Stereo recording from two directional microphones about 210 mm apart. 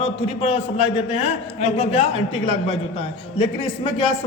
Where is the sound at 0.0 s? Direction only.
30° left (ahead or behind).